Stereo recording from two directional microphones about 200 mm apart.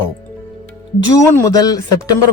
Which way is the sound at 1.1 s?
15° left (ahead or behind).